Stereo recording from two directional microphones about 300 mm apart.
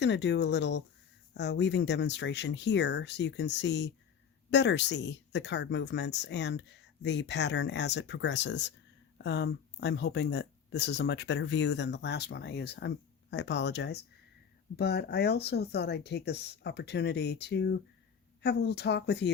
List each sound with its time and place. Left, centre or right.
0.0 s speech: left